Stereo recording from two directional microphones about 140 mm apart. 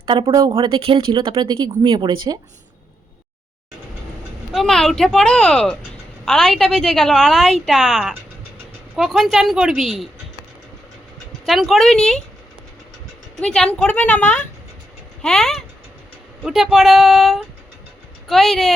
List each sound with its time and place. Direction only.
0.0 s speech: 35° right (ahead or behind)
4.5 s a woman's voice: 5° left (ahead or behind)
11.4 s a woman's voice: centre (ahead or behind)
13.4 s a woman's voice: 5° left (ahead or behind)